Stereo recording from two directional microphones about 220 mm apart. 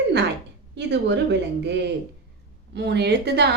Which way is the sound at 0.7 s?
50° right (ahead or behind).